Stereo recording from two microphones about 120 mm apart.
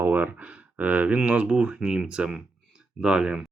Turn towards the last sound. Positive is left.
turn(degrees=-5)  # may be behind; listen again after turning